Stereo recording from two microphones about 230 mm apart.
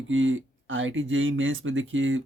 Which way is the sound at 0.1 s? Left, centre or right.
Right.